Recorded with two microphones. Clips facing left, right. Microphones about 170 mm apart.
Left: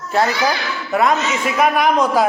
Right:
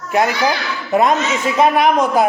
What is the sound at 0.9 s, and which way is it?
Speech, 25° right (ahead or behind).